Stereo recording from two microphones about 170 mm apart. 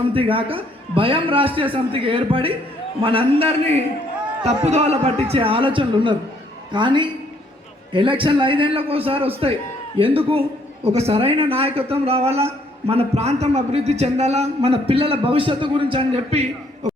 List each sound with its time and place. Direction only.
0.1 s a man's voice: 30° right (ahead or behind)